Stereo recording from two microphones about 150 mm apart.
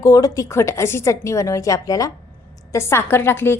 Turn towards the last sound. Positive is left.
turn(degrees=15)  # may be behind; listen again after turning